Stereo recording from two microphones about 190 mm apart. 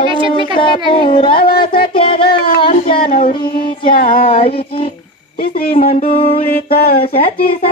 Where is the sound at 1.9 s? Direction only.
30° left (ahead or behind).